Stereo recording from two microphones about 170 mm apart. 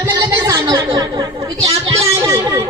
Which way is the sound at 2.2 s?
20° right (ahead or behind).